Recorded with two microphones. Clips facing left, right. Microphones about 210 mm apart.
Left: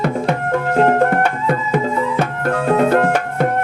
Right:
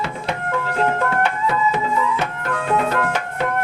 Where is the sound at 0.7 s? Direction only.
40° left (ahead or behind).